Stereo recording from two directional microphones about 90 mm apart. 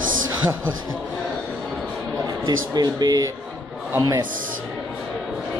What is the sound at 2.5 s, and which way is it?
Speech, 45° right (ahead or behind).